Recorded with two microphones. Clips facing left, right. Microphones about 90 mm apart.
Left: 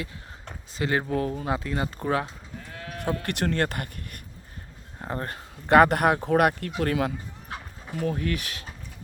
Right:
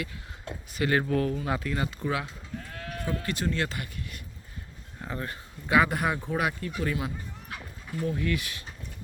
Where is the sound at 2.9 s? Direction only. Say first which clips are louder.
Left 4 dB; 65° left (ahead or behind).